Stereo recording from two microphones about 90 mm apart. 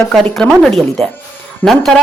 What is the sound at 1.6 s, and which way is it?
Speech, 20° left (ahead or behind).